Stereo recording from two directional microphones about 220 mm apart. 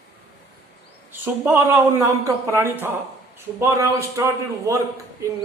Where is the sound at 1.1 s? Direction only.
10° right (ahead or behind).